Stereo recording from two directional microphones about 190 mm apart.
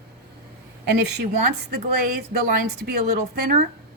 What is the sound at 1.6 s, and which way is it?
A woman's voice, 55° right (ahead or behind).